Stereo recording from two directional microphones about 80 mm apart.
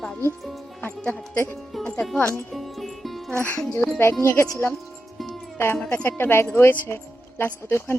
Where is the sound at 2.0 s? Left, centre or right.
Centre.